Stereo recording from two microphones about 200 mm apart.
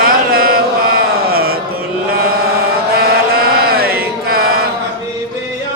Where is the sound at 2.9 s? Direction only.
50° right (ahead or behind).